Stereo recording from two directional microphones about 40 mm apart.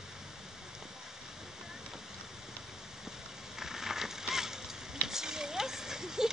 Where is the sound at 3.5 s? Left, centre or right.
Centre.